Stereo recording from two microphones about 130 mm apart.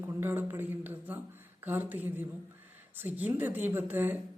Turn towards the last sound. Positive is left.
turn(degrees=-15)  # may be behind; listen again after turning